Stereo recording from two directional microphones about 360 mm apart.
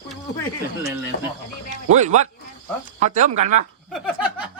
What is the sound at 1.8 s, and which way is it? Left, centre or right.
Speech, centre.